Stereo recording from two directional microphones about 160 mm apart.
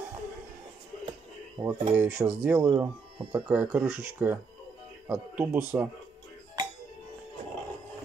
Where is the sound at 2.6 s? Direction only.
25° right (ahead or behind).